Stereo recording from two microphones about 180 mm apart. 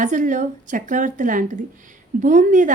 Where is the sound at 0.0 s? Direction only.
45° right (ahead or behind).